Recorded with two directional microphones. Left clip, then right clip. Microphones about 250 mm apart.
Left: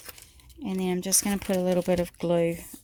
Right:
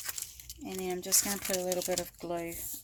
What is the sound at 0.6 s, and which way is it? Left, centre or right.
Speech, left.